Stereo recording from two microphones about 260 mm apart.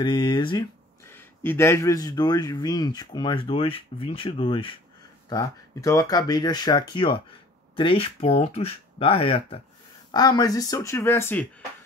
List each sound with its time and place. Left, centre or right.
0.0 s speech: centre